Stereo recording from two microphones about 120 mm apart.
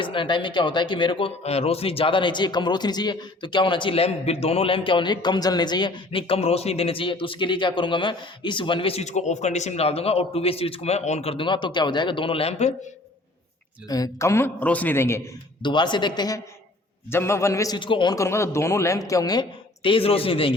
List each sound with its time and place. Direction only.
0.0 s speech: 45° left (ahead or behind)
1.5 s speech: 60° left (ahead or behind)
13.8 s a man's voice: 30° left (ahead or behind)
15.6 s speech: 40° left (ahead or behind)
17.1 s a man's voice: 20° left (ahead or behind)
17.7 s speech: 45° left (ahead or behind)
18.1 s speech: 25° left (ahead or behind); by 20.6 s 45° left (ahead or behind)